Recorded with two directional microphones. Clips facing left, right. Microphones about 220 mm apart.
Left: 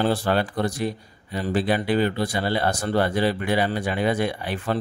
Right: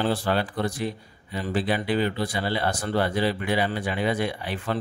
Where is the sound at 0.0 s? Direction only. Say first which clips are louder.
Left 3 dB; 45° left (ahead or behind).